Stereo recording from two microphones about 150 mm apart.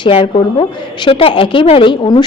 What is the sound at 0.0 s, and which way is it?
A woman's voice, 35° left (ahead or behind).